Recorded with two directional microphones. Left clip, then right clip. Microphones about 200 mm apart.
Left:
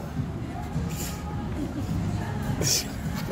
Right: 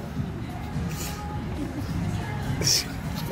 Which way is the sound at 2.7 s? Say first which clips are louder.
Right 3 dB; 15° left (ahead or behind).